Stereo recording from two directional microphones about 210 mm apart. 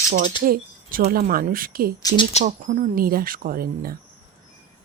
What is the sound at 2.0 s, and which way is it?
Speech, 15° left (ahead or behind).